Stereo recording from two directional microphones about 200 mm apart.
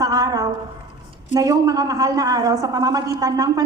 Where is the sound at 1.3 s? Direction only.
20° right (ahead or behind).